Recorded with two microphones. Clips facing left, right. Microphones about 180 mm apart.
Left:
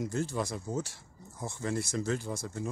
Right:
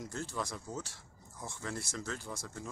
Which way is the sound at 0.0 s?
15° left (ahead or behind).